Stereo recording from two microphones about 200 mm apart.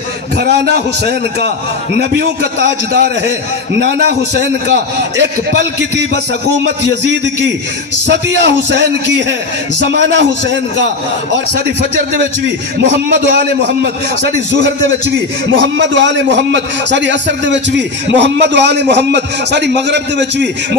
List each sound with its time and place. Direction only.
0.4 s a man's voice: 55° right (ahead or behind)
5.2 s a man's voice: 60° right (ahead or behind)
12.9 s a man's voice: 60° right (ahead or behind)